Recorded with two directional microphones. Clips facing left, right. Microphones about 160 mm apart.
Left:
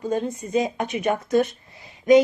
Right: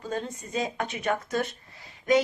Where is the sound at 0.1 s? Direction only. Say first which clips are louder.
Left 8 dB; 15° left (ahead or behind).